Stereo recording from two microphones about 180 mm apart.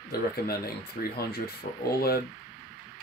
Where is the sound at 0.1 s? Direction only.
60° left (ahead or behind).